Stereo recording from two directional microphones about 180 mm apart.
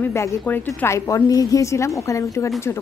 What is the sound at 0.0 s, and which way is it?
A woman's voice, 15° left (ahead or behind).